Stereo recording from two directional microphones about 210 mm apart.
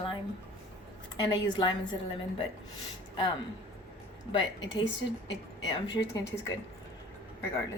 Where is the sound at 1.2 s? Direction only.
20° left (ahead or behind).